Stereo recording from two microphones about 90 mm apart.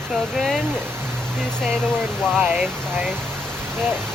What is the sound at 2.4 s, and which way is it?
Speech, 15° right (ahead or behind).